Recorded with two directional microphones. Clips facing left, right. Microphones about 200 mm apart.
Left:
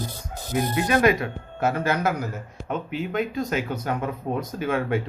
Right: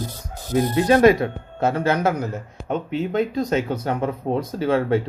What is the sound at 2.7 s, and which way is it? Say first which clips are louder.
Speech: right 5 dB; 35° right (ahead or behind).